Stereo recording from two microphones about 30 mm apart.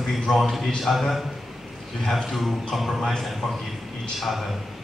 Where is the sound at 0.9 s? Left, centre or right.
Centre.